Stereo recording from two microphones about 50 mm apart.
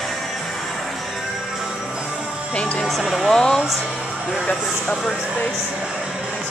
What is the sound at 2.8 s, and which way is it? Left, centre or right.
Speech, centre.